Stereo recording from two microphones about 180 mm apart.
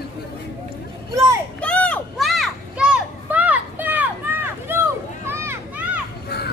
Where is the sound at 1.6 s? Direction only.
5° left (ahead or behind); by 5.9 s 15° right (ahead or behind).